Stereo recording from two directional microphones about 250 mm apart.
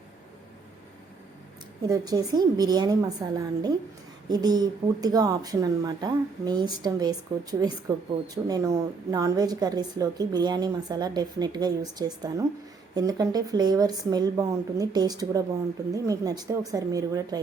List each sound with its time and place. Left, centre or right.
1.9 s a woman's voice: centre
8.4 s a woman's voice: centre